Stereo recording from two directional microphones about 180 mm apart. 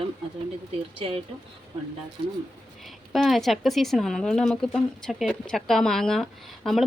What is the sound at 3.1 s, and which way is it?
Speech, centre (ahead or behind).